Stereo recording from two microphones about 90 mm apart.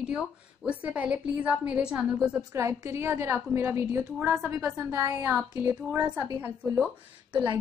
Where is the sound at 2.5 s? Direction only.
35° right (ahead or behind).